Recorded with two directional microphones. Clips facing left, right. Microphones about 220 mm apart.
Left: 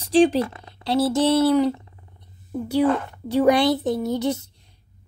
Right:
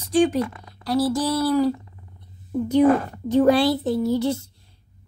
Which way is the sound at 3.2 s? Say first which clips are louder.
Right 1 dB; 15° left (ahead or behind).